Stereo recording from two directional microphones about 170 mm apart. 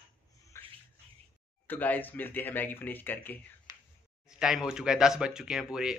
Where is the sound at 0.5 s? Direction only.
15° left (ahead or behind).